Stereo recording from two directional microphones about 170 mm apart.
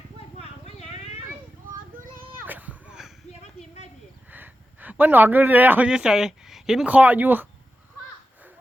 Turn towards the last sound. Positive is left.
turn(degrees=-10)  # may be behind; listen again after turning